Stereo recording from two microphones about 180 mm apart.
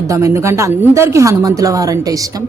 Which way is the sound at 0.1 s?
15° right (ahead or behind).